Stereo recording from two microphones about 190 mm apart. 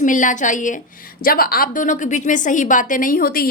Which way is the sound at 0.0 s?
45° left (ahead or behind).